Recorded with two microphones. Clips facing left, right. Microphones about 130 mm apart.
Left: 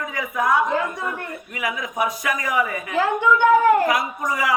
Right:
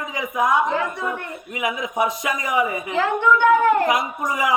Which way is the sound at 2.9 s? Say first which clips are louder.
Even; 10° left (ahead or behind).